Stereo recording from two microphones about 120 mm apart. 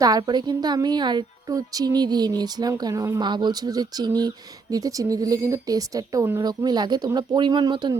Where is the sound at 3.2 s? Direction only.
40° right (ahead or behind).